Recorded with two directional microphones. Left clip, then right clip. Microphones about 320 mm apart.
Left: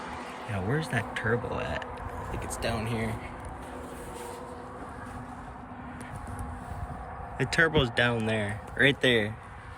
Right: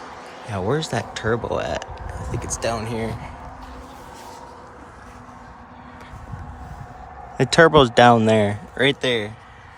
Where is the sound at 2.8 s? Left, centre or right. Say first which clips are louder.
Right 6 dB; right.